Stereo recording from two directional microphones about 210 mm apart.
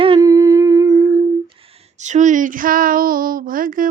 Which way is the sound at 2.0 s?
35° right (ahead or behind).